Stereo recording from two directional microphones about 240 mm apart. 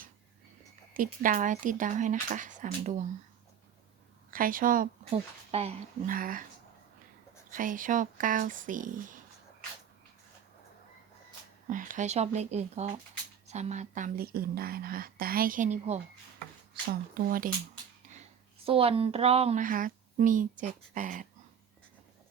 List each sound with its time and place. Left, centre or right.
0.9 s speech: right
4.3 s speech: right
7.5 s speech: right
11.7 s speech: right
18.1 s speech: right